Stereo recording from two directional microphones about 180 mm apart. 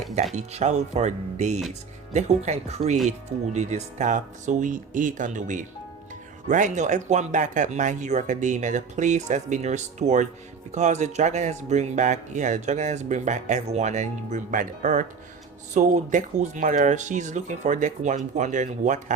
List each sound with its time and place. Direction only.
0.3 s speech: 40° right (ahead or behind)